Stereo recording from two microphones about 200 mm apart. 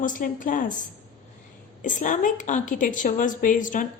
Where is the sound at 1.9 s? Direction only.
40° left (ahead or behind).